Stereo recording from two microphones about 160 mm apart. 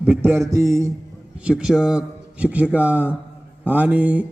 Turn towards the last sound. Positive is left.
turn(degrees=-10)  # may be behind; listen again after turning